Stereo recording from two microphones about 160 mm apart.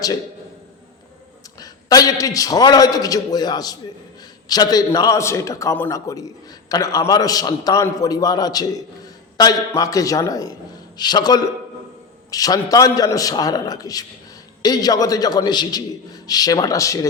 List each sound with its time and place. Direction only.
1.5 s a man's voice: 25° left (ahead or behind)